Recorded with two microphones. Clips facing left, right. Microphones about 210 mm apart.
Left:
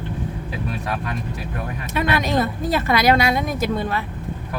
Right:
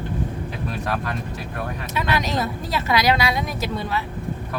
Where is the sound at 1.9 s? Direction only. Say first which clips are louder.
Left 4 dB; 55° left (ahead or behind).